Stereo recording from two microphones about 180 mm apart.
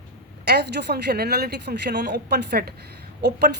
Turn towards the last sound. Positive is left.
turn(degrees=-65)  # may be behind; listen again after turning